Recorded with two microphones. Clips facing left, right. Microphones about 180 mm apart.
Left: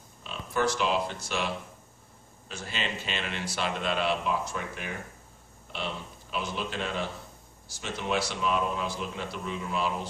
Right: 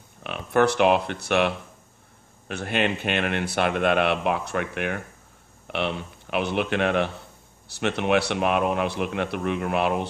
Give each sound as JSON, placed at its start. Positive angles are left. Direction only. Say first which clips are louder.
{"t": 0.2, "sound": "a man's voice", "louder": "right 8 dB", "side_deg": -65}